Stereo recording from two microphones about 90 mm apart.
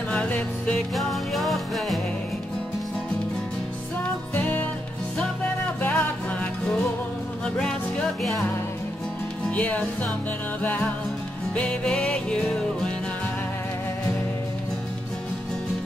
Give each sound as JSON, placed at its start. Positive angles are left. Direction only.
{"t": 0.1, "sound": "music", "side_deg": 15}
{"t": 0.9, "sound": "music", "side_deg": 0}
{"t": 4.4, "sound": "music", "side_deg": 15}
{"t": 5.8, "sound": "music", "side_deg": 15}
{"t": 9.5, "sound": "music", "side_deg": 15}